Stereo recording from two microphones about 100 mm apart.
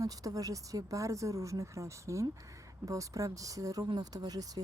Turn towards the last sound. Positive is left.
turn(degrees=-40)  # may be behind; listen again after turning